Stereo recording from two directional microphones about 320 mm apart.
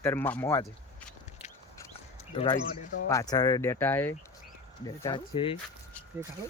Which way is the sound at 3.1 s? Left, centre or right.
Centre.